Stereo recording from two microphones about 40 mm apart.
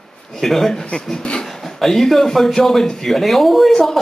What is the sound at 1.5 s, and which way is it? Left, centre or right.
Speech, centre.